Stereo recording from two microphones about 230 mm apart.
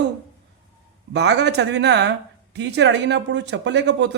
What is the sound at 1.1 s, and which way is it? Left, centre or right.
A man's voice, right.